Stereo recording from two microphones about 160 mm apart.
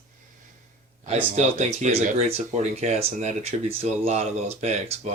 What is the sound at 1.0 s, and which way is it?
Speech, 45° right (ahead or behind).